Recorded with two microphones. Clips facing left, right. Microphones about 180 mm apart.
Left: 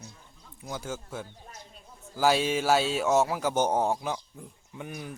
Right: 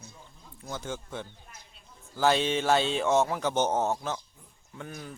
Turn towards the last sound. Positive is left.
turn(degrees=15)  # may be behind; listen again after turning